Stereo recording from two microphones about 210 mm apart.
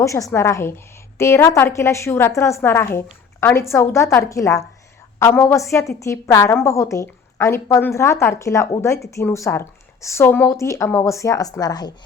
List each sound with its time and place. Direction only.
0.0 s a woman's voice: 15° left (ahead or behind)